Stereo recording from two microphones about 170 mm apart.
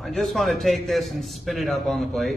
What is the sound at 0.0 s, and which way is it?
A man's voice, centre (ahead or behind).